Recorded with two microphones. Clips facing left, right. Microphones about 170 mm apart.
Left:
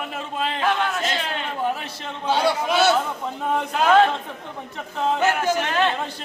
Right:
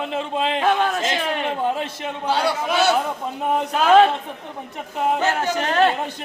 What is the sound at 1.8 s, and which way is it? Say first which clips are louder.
Speech: right 6 dB; 15° right (ahead or behind).